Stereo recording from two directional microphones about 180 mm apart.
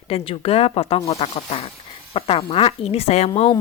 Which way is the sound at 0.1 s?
35° left (ahead or behind).